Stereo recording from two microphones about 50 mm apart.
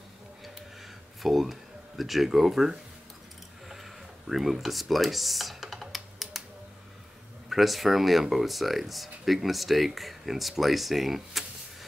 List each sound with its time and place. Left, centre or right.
1.2 s speech: centre
4.3 s speech: centre
7.4 s speech: centre